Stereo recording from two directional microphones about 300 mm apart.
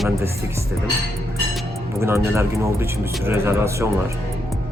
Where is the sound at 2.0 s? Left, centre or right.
Centre.